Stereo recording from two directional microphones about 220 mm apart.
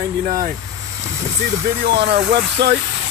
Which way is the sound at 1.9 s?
50° right (ahead or behind).